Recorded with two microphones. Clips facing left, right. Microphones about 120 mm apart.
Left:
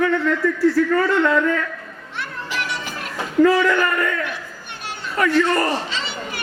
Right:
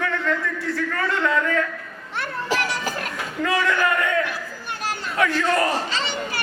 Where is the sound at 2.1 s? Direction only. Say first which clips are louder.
Right 3 dB; 40° right (ahead or behind).